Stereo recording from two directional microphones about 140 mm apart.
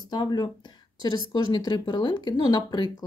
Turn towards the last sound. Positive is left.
turn(degrees=30)  # may be behind; listen again after turning